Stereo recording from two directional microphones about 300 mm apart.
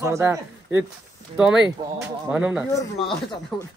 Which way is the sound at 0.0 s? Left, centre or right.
Centre.